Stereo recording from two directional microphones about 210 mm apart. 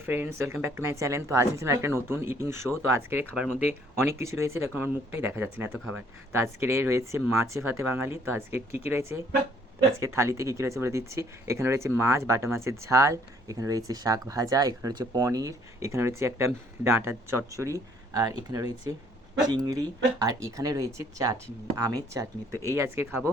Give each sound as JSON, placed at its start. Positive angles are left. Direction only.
{"t": 0.0, "sound": "speech", "side_deg": -10}